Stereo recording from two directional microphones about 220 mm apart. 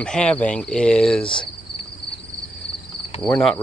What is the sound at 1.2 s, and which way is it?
Cricket, 20° left (ahead or behind).